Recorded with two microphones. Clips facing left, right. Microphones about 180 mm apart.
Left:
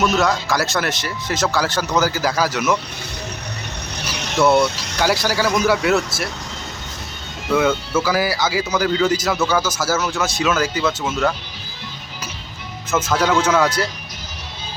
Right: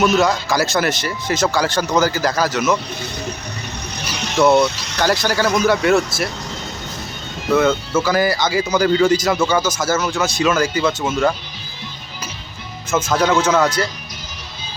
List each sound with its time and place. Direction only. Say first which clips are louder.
0.0 s speech: right 2 dB; centre (ahead or behind)
4.4 s speech: right 2 dB; 5° left (ahead or behind)
7.9 s speech: right 2 dB; 5° left (ahead or behind)
13.1 s speech: right 1 dB; 10° left (ahead or behind)